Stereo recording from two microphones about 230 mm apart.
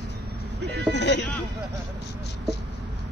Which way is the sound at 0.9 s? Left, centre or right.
Left.